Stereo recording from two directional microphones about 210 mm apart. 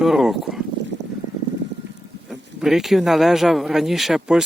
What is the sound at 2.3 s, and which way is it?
Speech, centre (ahead or behind).